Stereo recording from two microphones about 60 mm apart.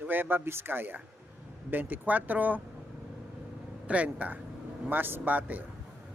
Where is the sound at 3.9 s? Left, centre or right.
Right.